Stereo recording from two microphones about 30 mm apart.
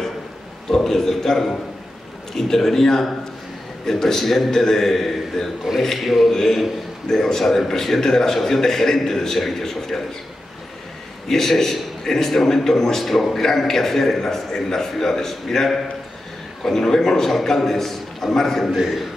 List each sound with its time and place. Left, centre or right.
0.7 s a man's voice: centre
5.9 s speech: centre
7.1 s a man's voice: centre
11.2 s a man's voice: centre